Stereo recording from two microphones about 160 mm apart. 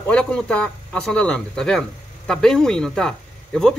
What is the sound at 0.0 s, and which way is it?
Speech, 5° left (ahead or behind).